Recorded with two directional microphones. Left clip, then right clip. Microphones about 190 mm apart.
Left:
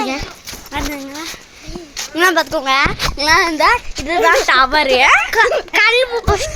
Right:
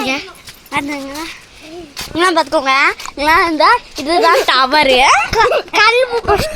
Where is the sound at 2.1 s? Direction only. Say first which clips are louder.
Right 1 dB; 15° right (ahead or behind); by 4.9 s 40° right (ahead or behind).